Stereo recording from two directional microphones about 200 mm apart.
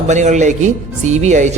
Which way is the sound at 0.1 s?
35° right (ahead or behind).